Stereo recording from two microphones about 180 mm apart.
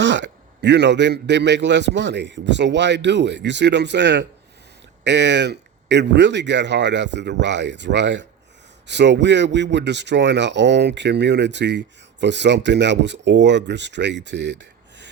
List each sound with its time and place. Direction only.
0.0 s speech: 75° right (ahead or behind)